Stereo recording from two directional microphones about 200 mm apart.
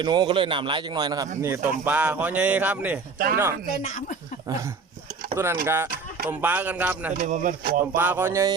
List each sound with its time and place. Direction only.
0.0 s a man's voice: 20° right (ahead or behind)
4.4 s speech: 15° right (ahead or behind)
7.2 s speech: 40° right (ahead or behind)
7.9 s speech: 10° right (ahead or behind)